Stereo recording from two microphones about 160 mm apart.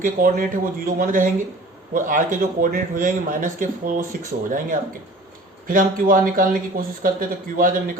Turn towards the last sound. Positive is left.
turn(degrees=-60)  # may be behind; listen again after turning